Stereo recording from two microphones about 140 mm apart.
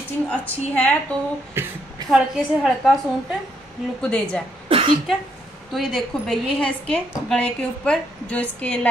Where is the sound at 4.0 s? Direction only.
5° left (ahead or behind).